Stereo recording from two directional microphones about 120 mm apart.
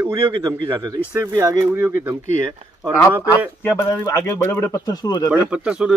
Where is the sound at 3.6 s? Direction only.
20° left (ahead or behind).